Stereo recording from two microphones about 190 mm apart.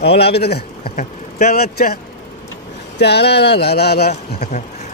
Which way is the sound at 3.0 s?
60° left (ahead or behind).